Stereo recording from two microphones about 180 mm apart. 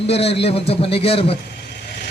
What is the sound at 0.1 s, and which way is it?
A man's voice, 35° left (ahead or behind).